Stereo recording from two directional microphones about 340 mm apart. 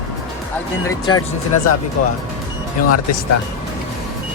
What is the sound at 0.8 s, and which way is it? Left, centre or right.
Speech, centre.